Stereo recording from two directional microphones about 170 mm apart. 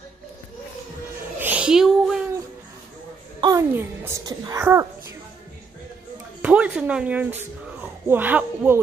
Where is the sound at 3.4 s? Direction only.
20° right (ahead or behind).